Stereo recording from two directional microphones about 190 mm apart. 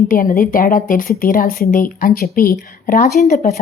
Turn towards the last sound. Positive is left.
turn(degrees=40)  # may be behind; listen again after turning